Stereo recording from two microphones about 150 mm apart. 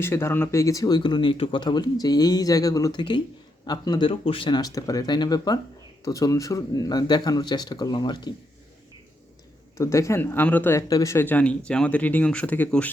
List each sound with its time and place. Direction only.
0.0 s speech: 15° left (ahead or behind)
9.7 s speech: 20° left (ahead or behind)